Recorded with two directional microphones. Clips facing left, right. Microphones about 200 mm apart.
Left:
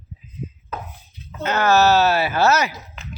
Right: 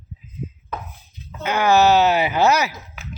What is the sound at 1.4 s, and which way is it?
Speech, 10° right (ahead or behind).